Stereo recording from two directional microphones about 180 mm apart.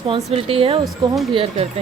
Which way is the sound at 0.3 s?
30° right (ahead or behind).